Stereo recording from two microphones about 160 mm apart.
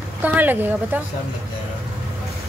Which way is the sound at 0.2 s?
10° right (ahead or behind).